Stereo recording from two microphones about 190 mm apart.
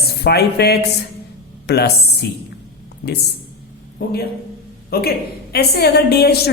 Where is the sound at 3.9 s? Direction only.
55° left (ahead or behind).